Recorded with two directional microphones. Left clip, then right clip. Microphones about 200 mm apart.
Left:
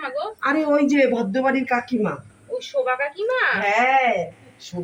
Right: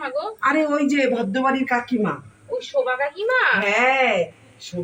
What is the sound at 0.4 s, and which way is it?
Speech, 10° left (ahead or behind).